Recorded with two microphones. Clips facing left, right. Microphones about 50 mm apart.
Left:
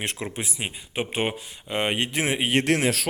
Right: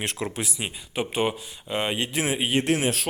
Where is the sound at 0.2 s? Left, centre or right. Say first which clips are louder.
Right 1 dB; left.